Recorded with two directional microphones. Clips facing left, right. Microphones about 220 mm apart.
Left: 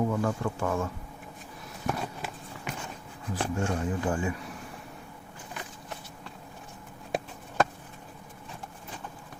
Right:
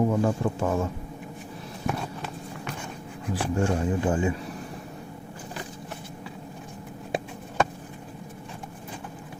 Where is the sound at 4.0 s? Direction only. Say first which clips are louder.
Right 5 dB; 25° right (ahead or behind).